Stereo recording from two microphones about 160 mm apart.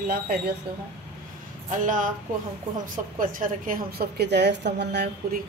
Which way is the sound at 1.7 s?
55° right (ahead or behind).